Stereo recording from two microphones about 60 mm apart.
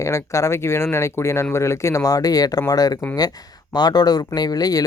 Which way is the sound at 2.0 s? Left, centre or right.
Left.